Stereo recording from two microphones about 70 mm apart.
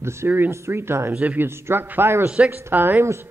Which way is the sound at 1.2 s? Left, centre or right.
Right.